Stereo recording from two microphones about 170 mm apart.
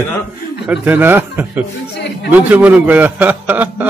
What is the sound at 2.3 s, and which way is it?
Mantra, 10° right (ahead or behind).